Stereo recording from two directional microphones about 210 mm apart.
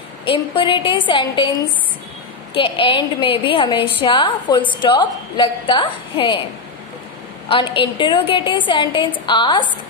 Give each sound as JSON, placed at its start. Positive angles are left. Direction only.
{"t": 0.2, "sound": "a woman's voice", "side_deg": 25}
{"t": 2.5, "sound": "a woman's voice", "side_deg": 25}
{"t": 7.4, "sound": "a woman's voice", "side_deg": 25}